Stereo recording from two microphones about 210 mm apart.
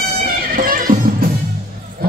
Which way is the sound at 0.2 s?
40° right (ahead or behind).